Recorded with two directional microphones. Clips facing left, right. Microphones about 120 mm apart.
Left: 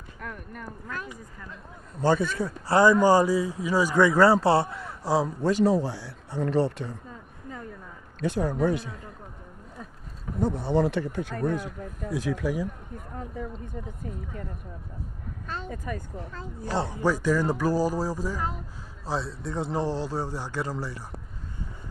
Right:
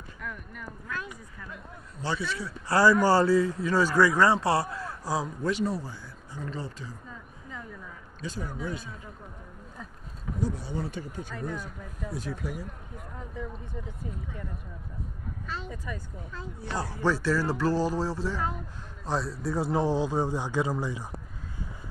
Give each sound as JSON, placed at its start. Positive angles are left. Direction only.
{"t": 0.2, "sound": "speech", "side_deg": 45}
{"t": 2.0, "sound": "speech", "side_deg": 50}
{"t": 2.7, "sound": "speech", "side_deg": 20}
{"t": 5.7, "sound": "speech", "side_deg": 85}
{"t": 8.2, "sound": "speech", "side_deg": 60}
{"t": 10.4, "sound": "speech", "side_deg": 60}
{"t": 13.8, "sound": "speech", "side_deg": 40}
{"t": 15.4, "sound": "speech", "side_deg": 50}
{"t": 16.7, "sound": "speech", "side_deg": 25}
{"t": 17.0, "sound": "speech", "side_deg": 10}
{"t": 19.0, "sound": "a man's voice", "side_deg": 0}